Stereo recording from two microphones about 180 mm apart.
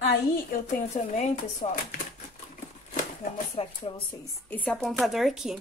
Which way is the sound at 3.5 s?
30° left (ahead or behind).